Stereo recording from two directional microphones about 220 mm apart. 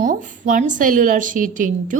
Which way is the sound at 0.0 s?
35° right (ahead or behind).